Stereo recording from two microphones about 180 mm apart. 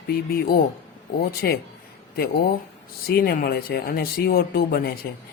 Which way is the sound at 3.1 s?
60° left (ahead or behind).